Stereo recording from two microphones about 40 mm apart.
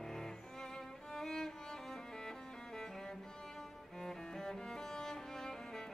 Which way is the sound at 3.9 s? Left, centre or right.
Centre.